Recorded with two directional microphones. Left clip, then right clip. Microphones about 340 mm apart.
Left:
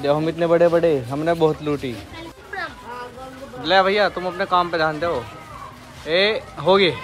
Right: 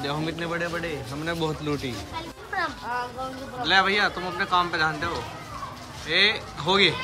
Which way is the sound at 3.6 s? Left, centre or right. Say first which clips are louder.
Left 4 dB; centre.